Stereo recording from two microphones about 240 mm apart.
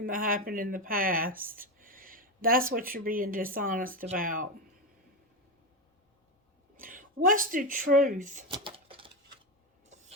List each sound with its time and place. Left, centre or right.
0.0 s speech: right
6.7 s speech: right
8.4 s typing: right
9.8 s printer: right